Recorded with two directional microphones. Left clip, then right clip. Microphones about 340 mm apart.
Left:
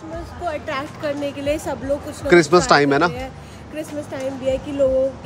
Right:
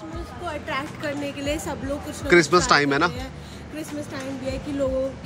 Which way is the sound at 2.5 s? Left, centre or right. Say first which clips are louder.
Left 4 dB; centre.